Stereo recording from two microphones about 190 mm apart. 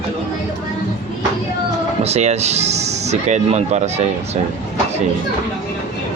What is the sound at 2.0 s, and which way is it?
Speech, 35° right (ahead or behind).